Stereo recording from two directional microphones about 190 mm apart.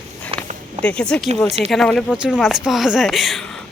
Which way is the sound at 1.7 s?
Centre (ahead or behind).